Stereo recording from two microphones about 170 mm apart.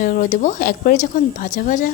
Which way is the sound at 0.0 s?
50° left (ahead or behind).